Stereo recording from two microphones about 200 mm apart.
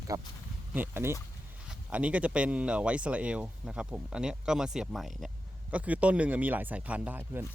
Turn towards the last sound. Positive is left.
turn(degrees=-10)  # may be behind; listen again after turning